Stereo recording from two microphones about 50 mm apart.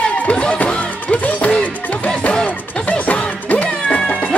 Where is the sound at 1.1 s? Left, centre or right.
Left.